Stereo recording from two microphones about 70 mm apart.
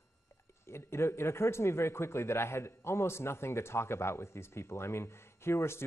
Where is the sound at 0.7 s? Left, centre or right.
Left.